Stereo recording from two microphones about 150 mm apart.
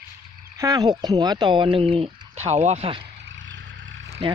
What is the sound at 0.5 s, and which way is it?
Speech, 25° right (ahead or behind).